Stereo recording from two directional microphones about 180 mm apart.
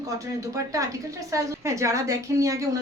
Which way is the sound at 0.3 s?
20° right (ahead or behind).